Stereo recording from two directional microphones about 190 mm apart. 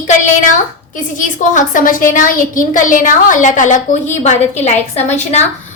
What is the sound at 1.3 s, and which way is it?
A woman's voice, 45° left (ahead or behind).